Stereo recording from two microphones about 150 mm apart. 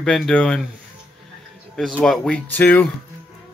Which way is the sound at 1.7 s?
5° left (ahead or behind).